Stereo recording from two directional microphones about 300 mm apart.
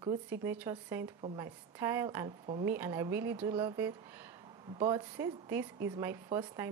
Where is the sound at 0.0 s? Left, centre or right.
Centre.